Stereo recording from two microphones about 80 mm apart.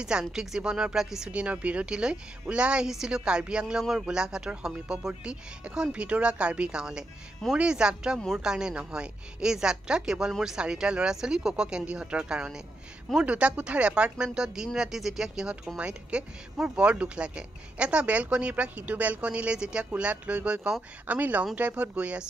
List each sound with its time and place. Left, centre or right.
0.0 s speech: centre